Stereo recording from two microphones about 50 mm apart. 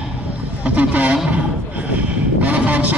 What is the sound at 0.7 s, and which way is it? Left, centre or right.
A man's voice, right.